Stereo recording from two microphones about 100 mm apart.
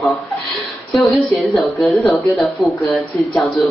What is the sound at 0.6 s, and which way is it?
A woman's voice, centre (ahead or behind).